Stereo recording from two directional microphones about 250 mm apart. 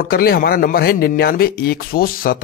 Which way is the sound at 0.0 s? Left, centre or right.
Left.